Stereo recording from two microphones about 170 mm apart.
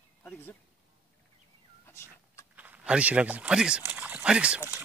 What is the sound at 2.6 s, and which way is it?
Speech, 10° right (ahead or behind).